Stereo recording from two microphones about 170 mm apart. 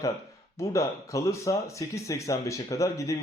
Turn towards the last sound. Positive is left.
turn(degrees=20)  # may be behind; listen again after turning